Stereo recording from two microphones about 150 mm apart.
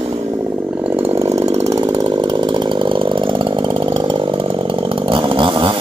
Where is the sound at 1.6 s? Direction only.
25° right (ahead or behind).